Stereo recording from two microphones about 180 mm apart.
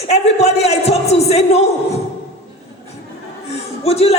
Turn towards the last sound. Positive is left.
turn(degrees=35)  # may be behind; listen again after turning